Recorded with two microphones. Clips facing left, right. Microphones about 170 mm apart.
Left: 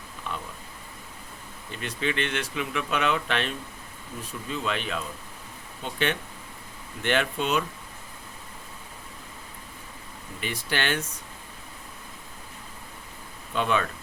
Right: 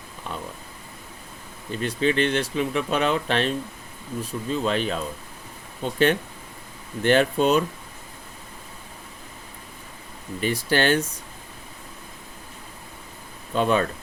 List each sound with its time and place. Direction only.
0.3 s a sound: 40° right (ahead or behind)
1.7 s speech: 35° right (ahead or behind)
10.4 s speech: 35° right (ahead or behind)
13.5 s speech: 40° right (ahead or behind)